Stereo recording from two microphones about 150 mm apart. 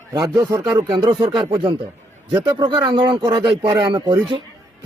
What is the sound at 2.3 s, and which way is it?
Speech, 30° right (ahead or behind).